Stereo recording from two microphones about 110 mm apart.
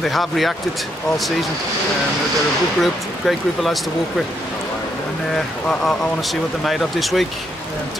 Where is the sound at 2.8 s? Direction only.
Centre (ahead or behind).